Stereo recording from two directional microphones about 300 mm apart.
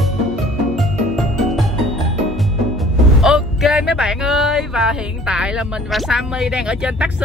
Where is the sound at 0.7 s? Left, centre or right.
Centre.